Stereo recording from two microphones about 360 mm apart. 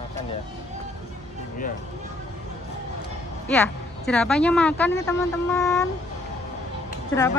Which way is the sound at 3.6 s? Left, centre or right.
Centre.